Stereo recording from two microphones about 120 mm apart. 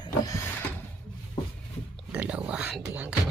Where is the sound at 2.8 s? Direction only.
10° right (ahead or behind).